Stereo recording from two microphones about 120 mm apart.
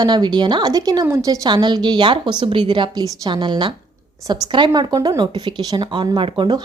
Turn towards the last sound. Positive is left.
turn(degrees=-35)  # may be behind; listen again after turning